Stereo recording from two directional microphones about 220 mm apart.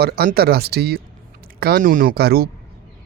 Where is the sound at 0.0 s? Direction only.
45° right (ahead or behind).